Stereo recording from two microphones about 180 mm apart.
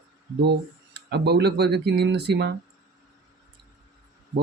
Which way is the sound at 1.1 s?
65° right (ahead or behind).